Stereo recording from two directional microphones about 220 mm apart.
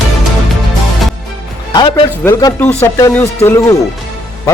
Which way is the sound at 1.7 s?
20° left (ahead or behind).